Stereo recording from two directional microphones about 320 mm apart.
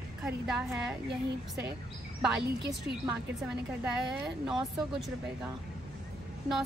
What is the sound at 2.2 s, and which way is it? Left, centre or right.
Speech, centre.